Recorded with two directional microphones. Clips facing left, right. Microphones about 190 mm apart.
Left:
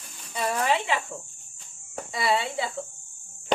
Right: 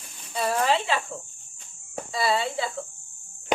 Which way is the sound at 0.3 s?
15° left (ahead or behind).